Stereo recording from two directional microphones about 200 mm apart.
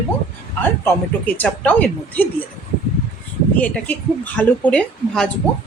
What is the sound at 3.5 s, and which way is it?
Speech, 5° left (ahead or behind).